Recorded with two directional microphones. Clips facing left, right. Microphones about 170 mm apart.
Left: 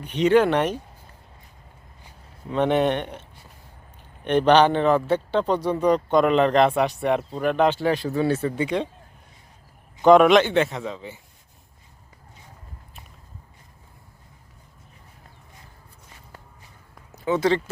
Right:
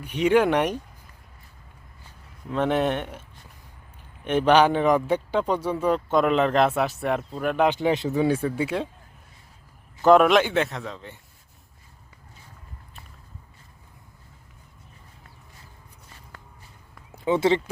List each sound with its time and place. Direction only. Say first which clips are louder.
0.0 s speech: left 2 dB; 10° right (ahead or behind)
2.5 s a man's voice: left 2 dB; centre (ahead or behind)
10.0 s a man's voice: left 2 dB; centre (ahead or behind)
17.2 s speech: even; 25° right (ahead or behind)